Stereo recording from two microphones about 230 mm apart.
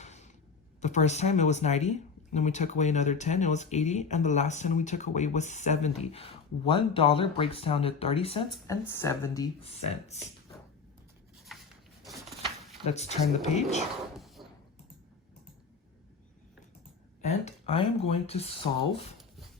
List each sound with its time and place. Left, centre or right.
0.0 s a sound: left
0.8 s speech: left
8.6 s speech: centre; by 10.2 s left
11.5 s a sound: centre
12.9 s speech: left
17.2 s speech: left